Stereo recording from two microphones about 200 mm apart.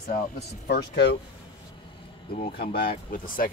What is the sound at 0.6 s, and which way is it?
Speech, 55° left (ahead or behind).